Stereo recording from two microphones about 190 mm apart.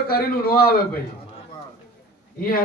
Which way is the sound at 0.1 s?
55° left (ahead or behind).